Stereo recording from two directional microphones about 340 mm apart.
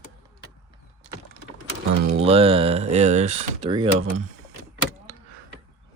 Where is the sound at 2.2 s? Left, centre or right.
Centre.